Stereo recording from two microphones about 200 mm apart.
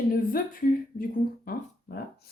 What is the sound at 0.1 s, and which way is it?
Speech, 45° left (ahead or behind).